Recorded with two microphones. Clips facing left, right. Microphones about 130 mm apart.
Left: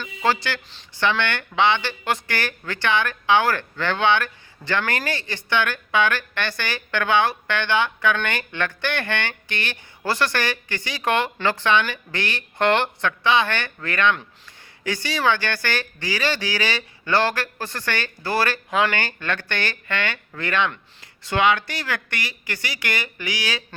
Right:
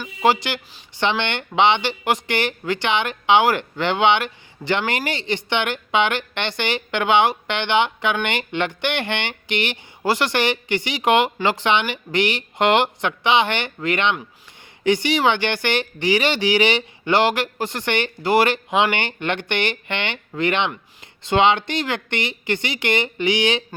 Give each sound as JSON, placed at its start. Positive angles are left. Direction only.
{"t": 0.0, "sound": "speech", "side_deg": -15}